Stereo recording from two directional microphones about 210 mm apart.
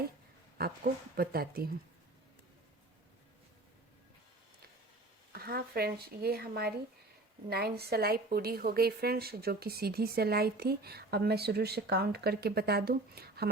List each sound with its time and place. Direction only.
1.1 s a woman's voice: 45° right (ahead or behind)
5.3 s a woman's voice: 45° right (ahead or behind)